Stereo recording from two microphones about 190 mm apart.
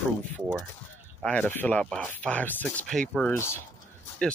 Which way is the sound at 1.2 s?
10° left (ahead or behind).